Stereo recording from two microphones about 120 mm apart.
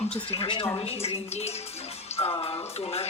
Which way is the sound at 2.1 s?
55° left (ahead or behind).